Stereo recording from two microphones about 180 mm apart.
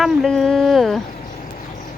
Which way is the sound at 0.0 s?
Centre (ahead or behind).